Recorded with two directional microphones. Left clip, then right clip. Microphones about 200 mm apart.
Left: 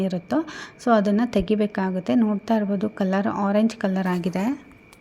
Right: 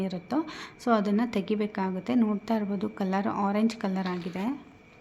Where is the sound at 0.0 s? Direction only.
20° left (ahead or behind).